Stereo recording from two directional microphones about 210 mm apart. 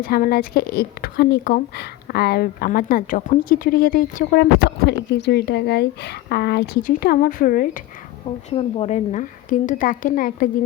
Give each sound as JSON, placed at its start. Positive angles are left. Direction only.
{"t": 0.0, "sound": "a woman's voice", "side_deg": 45}
{"t": 8.4, "sound": "a woman's voice", "side_deg": 30}